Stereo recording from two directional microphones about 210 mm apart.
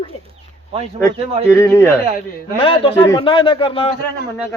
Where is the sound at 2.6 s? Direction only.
25° left (ahead or behind).